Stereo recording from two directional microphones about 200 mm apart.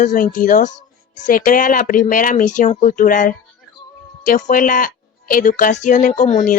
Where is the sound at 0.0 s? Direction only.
40° left (ahead or behind).